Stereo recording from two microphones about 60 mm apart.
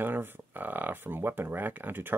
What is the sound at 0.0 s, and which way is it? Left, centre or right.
Speech, right.